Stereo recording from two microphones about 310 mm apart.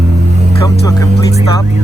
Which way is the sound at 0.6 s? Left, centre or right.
Centre.